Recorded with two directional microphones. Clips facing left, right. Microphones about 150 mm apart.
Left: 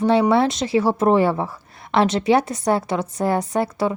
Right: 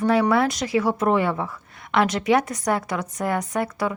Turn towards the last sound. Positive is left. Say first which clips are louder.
# left 4 dB
turn(degrees=30)  # may be behind; listen again after turning